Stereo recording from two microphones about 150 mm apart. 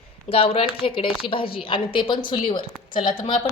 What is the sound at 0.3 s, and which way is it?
A woman's voice, 40° left (ahead or behind).